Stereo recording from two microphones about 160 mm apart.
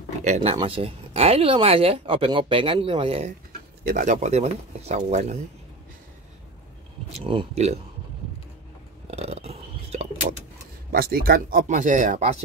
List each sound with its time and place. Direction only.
0.2 s speech: 45° right (ahead or behind)
3.8 s speech: 55° right (ahead or behind)
7.1 s speech: 40° right (ahead or behind)
9.1 s a sound: 40° right (ahead or behind)
10.2 s a sound: 55° right (ahead or behind)
10.9 s speech: 70° right (ahead or behind); by 12.2 s 55° right (ahead or behind)